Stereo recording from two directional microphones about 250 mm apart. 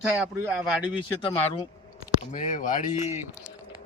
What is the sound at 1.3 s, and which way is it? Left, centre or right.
Speech, left.